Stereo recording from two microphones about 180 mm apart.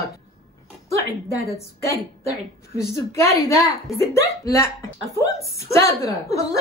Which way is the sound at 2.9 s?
15° left (ahead or behind).